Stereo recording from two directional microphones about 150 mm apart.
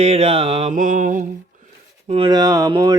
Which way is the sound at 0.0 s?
45° right (ahead or behind).